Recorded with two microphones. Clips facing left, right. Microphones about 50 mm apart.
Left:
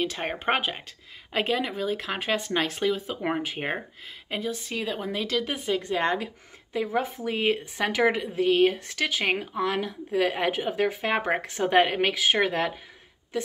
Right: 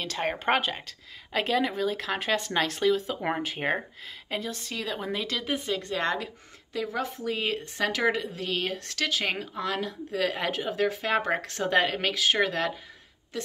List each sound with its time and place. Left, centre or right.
0.0 s speech: centre
5.1 s speech: centre